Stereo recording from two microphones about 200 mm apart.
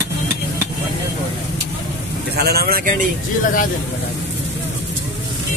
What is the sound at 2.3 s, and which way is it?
Vehicle, 50° right (ahead or behind).